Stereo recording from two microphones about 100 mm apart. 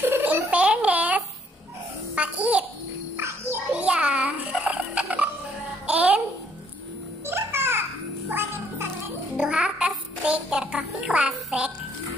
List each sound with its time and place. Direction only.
0.0 s a sound: 20° right (ahead or behind)
2.1 s babbling: 10° right (ahead or behind)
3.2 s bird: 25° right (ahead or behind)
3.7 s music: 10° right (ahead or behind)
7.2 s music: 25° right (ahead or behind)
8.3 s cat: 20° right (ahead or behind)
9.4 s child singing: 10° right (ahead or behind)